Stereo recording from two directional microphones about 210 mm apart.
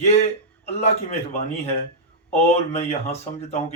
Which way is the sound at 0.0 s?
30° left (ahead or behind).